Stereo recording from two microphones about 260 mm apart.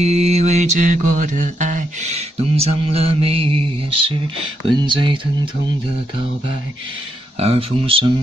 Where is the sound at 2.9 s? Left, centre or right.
Right.